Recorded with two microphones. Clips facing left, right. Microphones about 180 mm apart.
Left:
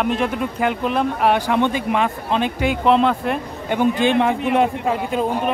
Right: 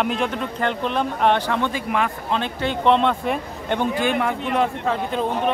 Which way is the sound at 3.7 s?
20° left (ahead or behind).